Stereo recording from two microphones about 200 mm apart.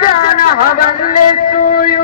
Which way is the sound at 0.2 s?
40° left (ahead or behind).